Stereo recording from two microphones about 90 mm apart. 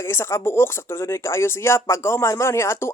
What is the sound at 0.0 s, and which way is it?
Speech, 30° left (ahead or behind).